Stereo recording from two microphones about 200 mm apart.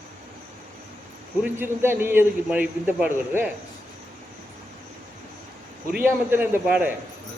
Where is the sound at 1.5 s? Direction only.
10° right (ahead or behind).